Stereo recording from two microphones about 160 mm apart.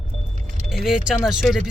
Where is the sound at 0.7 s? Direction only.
5° right (ahead or behind).